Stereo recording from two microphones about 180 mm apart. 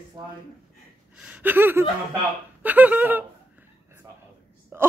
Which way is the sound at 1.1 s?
5° right (ahead or behind).